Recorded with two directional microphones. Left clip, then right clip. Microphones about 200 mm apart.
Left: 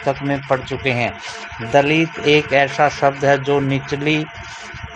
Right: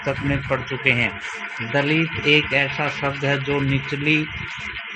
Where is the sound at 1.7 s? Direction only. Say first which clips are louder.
Left 6 dB; 55° left (ahead or behind).